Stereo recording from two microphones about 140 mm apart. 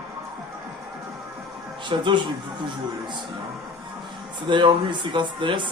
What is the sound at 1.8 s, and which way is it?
Speech, 35° right (ahead or behind).